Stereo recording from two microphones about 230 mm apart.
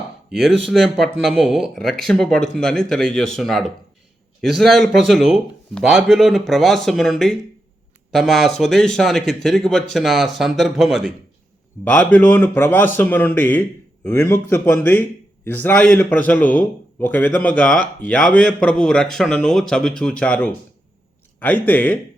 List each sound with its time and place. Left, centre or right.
0.3 s a man's voice: centre